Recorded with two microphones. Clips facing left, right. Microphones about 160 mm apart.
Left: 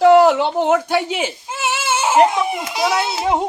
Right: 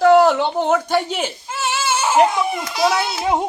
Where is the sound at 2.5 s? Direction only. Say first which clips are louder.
Right 1 dB; 20° left (ahead or behind).